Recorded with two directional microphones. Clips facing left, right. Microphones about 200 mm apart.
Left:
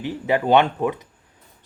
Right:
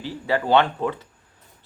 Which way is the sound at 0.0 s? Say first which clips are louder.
Left 3 dB; 20° left (ahead or behind).